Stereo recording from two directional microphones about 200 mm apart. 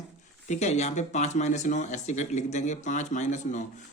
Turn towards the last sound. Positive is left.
turn(degrees=35)  # may be behind; listen again after turning